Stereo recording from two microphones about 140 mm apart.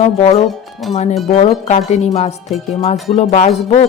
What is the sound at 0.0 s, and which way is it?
Speech, 45° left (ahead or behind).